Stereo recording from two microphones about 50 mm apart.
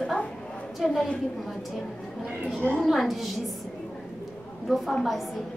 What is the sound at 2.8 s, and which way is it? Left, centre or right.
Speech, centre.